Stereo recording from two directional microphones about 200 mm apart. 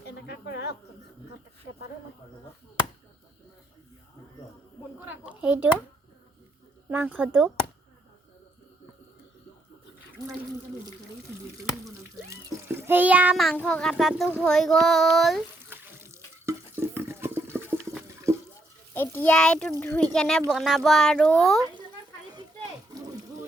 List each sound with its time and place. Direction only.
0.0 s snake: 60° left (ahead or behind)
5.0 s a sound: 5° right (ahead or behind)
6.9 s speech: 10° right (ahead or behind)
12.3 s a child's voice: 10° right (ahead or behind)
15.7 s water: 10° right (ahead or behind)
18.9 s a child's voice: 10° left (ahead or behind)